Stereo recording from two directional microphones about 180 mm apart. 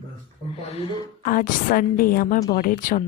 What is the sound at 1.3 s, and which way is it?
A woman's voice, 50° left (ahead or behind).